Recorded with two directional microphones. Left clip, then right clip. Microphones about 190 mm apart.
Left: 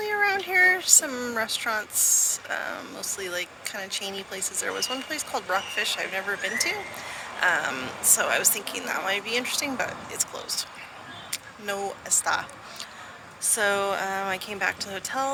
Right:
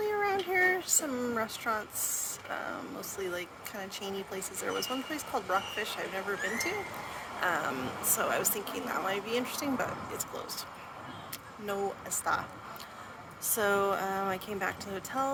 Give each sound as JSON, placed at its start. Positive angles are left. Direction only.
{"t": 0.0, "sound": "child singing", "side_deg": -15}
{"t": 1.4, "sound": "speech", "side_deg": -15}
{"t": 11.3, "sound": "a sound", "side_deg": -15}
{"t": 12.0, "sound": "speech", "side_deg": -15}